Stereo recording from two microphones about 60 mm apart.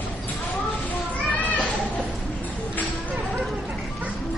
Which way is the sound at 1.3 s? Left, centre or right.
Left.